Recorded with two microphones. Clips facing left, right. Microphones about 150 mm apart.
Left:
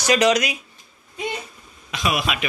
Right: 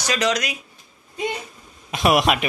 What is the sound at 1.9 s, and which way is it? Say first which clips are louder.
Speech: right 6 dB; 55° right (ahead or behind).